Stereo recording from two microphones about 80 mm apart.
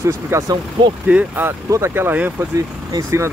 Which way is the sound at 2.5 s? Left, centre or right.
Right.